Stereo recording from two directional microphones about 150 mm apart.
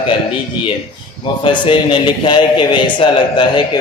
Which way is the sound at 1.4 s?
35° left (ahead or behind).